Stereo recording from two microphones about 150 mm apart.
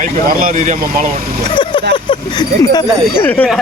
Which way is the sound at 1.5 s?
30° left (ahead or behind).